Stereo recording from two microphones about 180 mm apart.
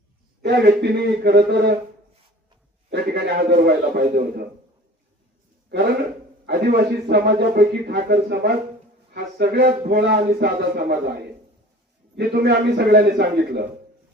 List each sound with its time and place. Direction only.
0.4 s a man's voice: 65° right (ahead or behind)
2.9 s a man's voice: 60° right (ahead or behind)
6.4 s a man's voice: 65° right (ahead or behind)
12.1 s a man's voice: 60° right (ahead or behind)